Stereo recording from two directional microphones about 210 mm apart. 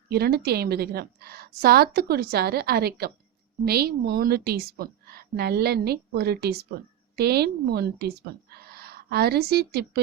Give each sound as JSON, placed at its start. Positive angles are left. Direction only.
{"t": 0.1, "sound": "a woman's voice", "side_deg": -50}